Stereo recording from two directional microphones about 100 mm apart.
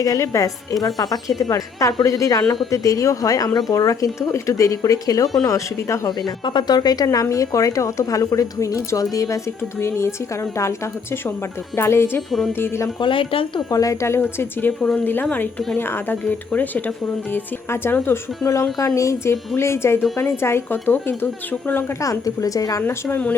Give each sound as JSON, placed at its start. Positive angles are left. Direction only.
{"t": 0.0, "sound": "speech", "side_deg": 35}
{"t": 6.4, "sound": "speech", "side_deg": 50}
{"t": 11.8, "sound": "a woman's voice", "side_deg": 25}
{"t": 13.0, "sound": "speech", "side_deg": 60}
{"t": 13.7, "sound": "a woman's voice", "side_deg": 35}
{"t": 14.8, "sound": "speech", "side_deg": 5}
{"t": 15.0, "sound": "a woman's voice", "side_deg": 20}
{"t": 22.0, "sound": "speech", "side_deg": 35}
{"t": 22.8, "sound": "speech", "side_deg": 20}